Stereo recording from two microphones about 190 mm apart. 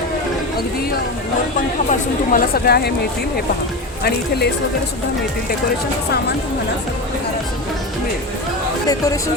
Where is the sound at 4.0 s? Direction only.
55° left (ahead or behind).